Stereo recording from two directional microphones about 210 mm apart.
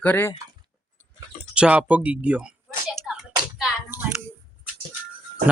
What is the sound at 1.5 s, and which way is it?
Speech, 5° right (ahead or behind).